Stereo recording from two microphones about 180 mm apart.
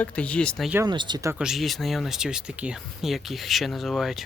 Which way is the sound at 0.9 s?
25° right (ahead or behind).